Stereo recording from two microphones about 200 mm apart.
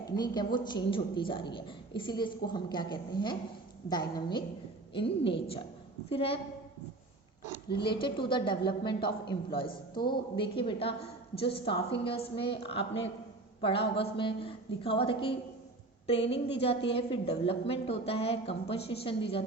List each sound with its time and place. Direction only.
0.2 s a woman's voice: 20° left (ahead or behind)
8.0 s a woman's voice: 25° left (ahead or behind)